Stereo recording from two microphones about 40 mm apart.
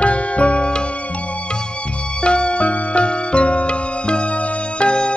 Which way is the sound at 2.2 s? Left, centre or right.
Left.